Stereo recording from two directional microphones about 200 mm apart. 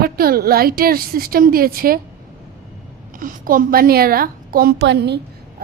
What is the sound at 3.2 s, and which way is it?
A woman's voice, 45° right (ahead or behind).